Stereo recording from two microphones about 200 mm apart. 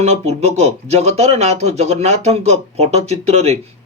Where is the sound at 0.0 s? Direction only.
30° right (ahead or behind).